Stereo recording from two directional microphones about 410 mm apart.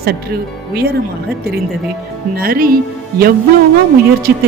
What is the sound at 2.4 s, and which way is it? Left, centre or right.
Speech, right.